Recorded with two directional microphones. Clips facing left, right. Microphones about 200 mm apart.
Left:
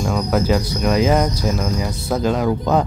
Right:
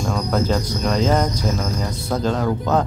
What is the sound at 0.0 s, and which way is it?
Speech, 10° left (ahead or behind).